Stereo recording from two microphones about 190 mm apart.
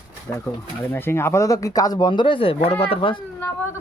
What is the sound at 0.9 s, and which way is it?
Speech, 10° left (ahead or behind).